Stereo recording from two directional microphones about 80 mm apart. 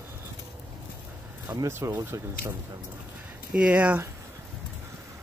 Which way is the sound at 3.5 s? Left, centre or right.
Centre.